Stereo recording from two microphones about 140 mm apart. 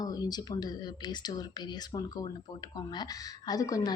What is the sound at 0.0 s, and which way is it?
A woman's voice, 30° left (ahead or behind).